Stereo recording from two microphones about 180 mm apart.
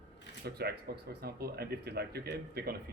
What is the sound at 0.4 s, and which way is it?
Speech, 60° right (ahead or behind).